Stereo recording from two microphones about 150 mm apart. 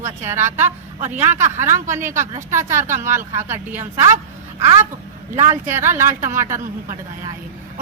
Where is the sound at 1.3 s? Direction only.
50° right (ahead or behind).